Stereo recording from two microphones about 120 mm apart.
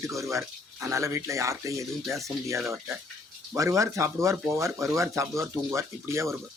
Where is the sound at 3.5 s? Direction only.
25° right (ahead or behind).